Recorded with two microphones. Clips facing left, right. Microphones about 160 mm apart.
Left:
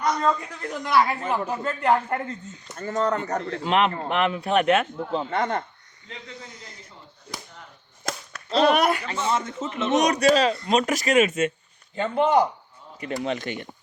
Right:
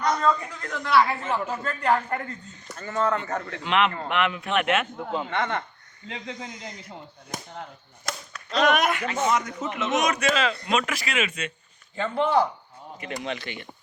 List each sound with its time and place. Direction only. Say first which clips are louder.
0.0 s a man's voice: even; 10° left (ahead or behind); by 5.6 s 40° left (ahead or behind)
6.1 s speech: right 5 dB; 75° right (ahead or behind)
8.4 s a man's voice: left 3 dB; 30° left (ahead or behind)
11.9 s speech: left 2 dB; 20° left (ahead or behind)
13.2 s speech: left 6 dB; 45° left (ahead or behind)